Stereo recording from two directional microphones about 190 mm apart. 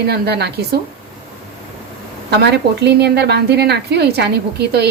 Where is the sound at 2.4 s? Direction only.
60° right (ahead or behind).